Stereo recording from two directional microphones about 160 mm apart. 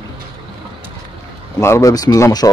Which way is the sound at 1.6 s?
20° left (ahead or behind).